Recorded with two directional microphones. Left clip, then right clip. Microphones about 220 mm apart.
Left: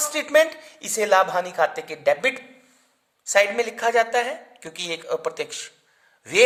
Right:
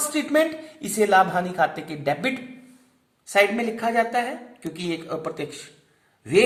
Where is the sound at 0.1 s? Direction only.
45° left (ahead or behind).